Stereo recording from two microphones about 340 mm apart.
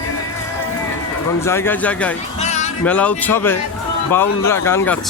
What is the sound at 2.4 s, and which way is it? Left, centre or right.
Music, centre.